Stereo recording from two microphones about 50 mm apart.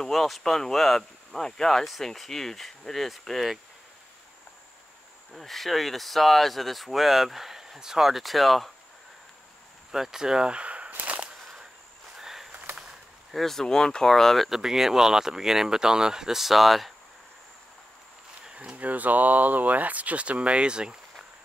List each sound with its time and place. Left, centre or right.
0.0 s speech: centre
5.3 s speech: centre
9.8 s speech: centre; by 10.9 s right
12.2 s a sound: centre
12.7 s speech: centre
18.8 s speech: right; by 21.3 s centre